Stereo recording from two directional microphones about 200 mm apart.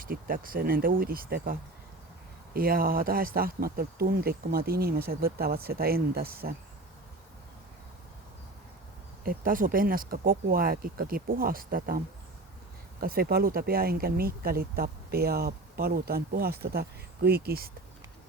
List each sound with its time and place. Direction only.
0.0 s speech: 45° right (ahead or behind)
9.2 s speech: 45° right (ahead or behind)